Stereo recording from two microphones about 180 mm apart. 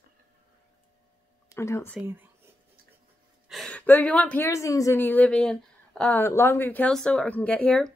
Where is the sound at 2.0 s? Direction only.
10° right (ahead or behind).